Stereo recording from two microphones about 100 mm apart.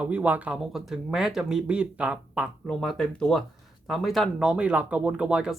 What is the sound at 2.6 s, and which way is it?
Speech, 5° left (ahead or behind).